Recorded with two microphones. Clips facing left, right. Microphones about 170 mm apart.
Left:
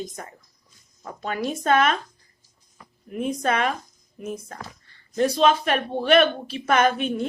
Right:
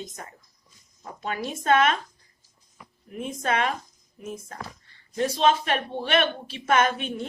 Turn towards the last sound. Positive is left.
turn(degrees=40)  # may be behind; listen again after turning